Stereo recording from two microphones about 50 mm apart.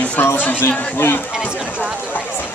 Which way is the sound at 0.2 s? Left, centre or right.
Left.